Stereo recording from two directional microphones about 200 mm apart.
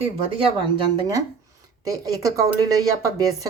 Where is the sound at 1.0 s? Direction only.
20° right (ahead or behind).